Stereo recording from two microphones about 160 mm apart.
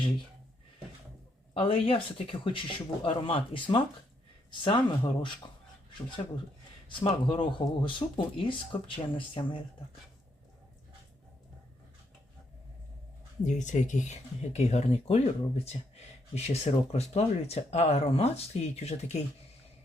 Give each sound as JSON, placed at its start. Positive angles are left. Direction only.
{"t": 1.5, "sound": "speech", "side_deg": 35}
{"t": 13.4, "sound": "speech", "side_deg": 50}